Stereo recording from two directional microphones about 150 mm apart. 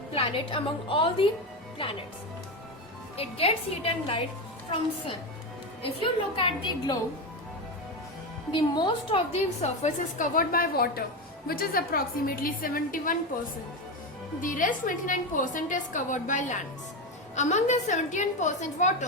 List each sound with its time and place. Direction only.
0.1 s a woman's voice: 35° left (ahead or behind)
3.2 s a woman's voice: 40° left (ahead or behind)
5.8 s a woman's voice: 35° left (ahead or behind)
8.5 s a woman's voice: 30° left (ahead or behind); by 13.1 s 65° left (ahead or behind)
14.4 s a woman's voice: 65° left (ahead or behind)